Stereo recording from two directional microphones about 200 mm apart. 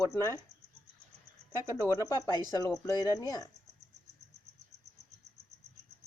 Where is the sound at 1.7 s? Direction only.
15° left (ahead or behind).